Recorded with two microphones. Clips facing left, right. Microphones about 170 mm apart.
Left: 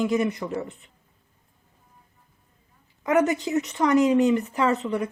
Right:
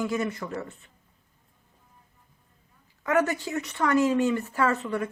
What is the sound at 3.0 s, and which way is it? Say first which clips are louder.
Speech: left 3 dB; 20° left (ahead or behind).